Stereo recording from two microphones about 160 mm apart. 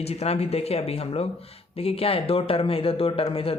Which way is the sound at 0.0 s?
40° left (ahead or behind).